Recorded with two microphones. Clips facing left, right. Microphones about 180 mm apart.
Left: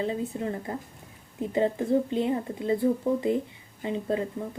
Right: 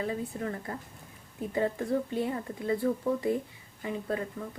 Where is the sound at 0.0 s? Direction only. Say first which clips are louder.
Left 4 dB; 25° left (ahead or behind).